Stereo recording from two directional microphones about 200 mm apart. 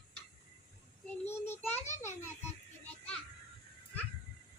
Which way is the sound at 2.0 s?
10° left (ahead or behind).